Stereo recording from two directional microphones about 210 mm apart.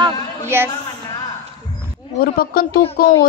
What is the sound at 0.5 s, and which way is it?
Speech, 10° right (ahead or behind).